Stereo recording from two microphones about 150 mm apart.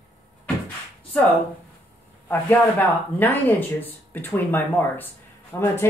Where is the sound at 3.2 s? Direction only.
10° left (ahead or behind).